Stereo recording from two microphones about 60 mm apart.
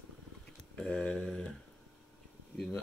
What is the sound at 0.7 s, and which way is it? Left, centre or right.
Speech, centre.